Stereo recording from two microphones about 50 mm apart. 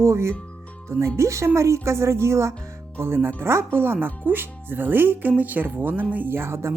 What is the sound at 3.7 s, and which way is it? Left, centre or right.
Speech, right.